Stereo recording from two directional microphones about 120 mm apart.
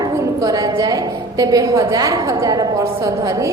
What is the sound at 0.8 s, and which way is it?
A woman's voice, 30° right (ahead or behind).